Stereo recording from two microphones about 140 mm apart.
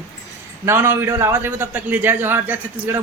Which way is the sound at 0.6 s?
15° right (ahead or behind).